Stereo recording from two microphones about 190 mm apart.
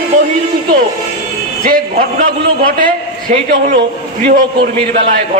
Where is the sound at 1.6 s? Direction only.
45° right (ahead or behind).